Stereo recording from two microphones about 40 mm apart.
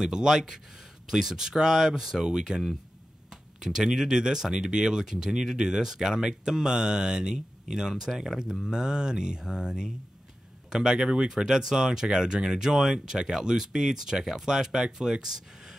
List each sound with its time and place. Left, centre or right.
0.0 s speech: centre